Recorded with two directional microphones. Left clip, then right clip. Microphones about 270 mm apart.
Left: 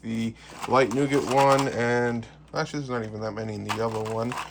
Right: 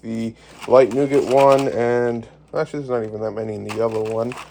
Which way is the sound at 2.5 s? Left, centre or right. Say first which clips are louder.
Right 7 dB; right.